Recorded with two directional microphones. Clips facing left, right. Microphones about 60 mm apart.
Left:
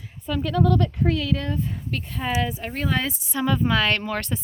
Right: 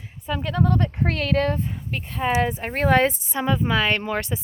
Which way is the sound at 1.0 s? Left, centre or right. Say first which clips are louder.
Right 2 dB; right.